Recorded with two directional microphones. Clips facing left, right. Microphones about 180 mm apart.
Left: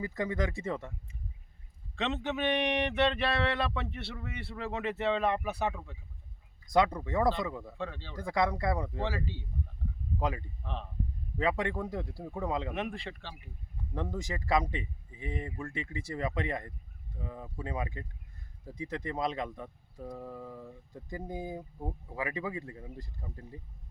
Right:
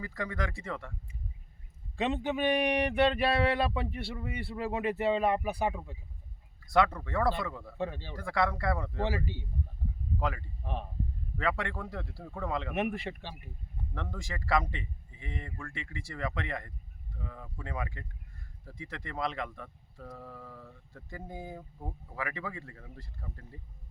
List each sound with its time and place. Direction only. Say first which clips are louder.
0.0 s speech: left 3 dB; 20° left (ahead or behind)
2.0 s speech: right 2 dB; 10° right (ahead or behind)
6.7 s speech: even; 15° left (ahead or behind)
7.8 s speech: right 3 dB; 15° right (ahead or behind)
8.1 s speech: left 2 dB; 20° left (ahead or behind)
9.0 s speech: right 2 dB; 15° right (ahead or behind)
10.2 s speech: left 1 dB; 20° left (ahead or behind)
10.6 s speech: right 2 dB; 15° right (ahead or behind)
11.3 s speech: left 3 dB; 20° left (ahead or behind)
12.7 s speech: right 4 dB; 15° right (ahead or behind)
13.9 s speech: left 5 dB; 20° left (ahead or behind)